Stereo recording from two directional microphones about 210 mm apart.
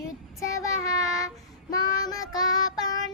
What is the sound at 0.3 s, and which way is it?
Child singing, 15° left (ahead or behind).